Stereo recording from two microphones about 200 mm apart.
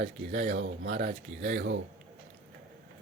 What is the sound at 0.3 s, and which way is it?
Speech, 60° right (ahead or behind).